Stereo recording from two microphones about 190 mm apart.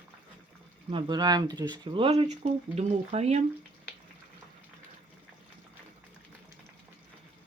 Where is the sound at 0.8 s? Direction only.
25° right (ahead or behind).